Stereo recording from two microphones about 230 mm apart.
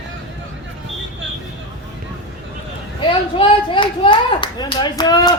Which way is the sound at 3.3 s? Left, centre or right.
Left.